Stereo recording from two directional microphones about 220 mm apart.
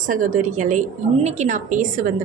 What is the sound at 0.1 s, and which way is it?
A woman's voice, 35° right (ahead or behind).